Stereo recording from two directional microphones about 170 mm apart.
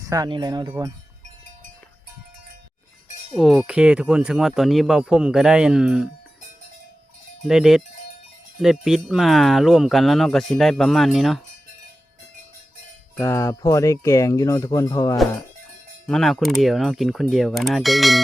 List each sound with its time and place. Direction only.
0.0 s speech: 20° right (ahead or behind)
3.3 s speech: centre (ahead or behind)
7.4 s speech: centre (ahead or behind)
13.1 s speech: 15° left (ahead or behind)
16.0 s speech: centre (ahead or behind)